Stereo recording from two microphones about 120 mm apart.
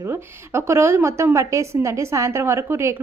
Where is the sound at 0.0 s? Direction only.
20° right (ahead or behind).